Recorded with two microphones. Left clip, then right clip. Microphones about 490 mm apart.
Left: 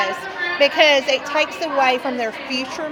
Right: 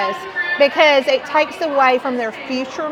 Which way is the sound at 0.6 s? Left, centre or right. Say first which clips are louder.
Right 2 dB; right.